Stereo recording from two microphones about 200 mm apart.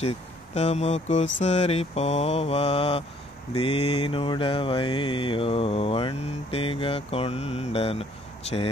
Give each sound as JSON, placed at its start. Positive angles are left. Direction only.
{"t": 0.6, "sound": "mantra", "side_deg": 35}